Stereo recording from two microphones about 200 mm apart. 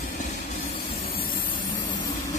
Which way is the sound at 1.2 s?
45° left (ahead or behind).